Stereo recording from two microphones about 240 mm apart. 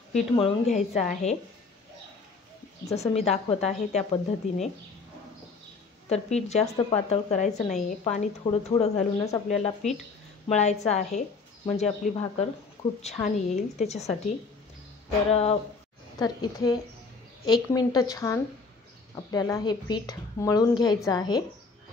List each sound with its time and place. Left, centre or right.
0.1 s a woman's voice: left
2.9 s a woman's voice: left
6.0 s a woman's voice: left
16.2 s a woman's voice: centre